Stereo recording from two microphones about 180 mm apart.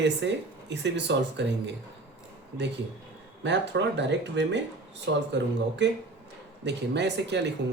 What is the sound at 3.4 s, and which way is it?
Speech, 75° right (ahead or behind).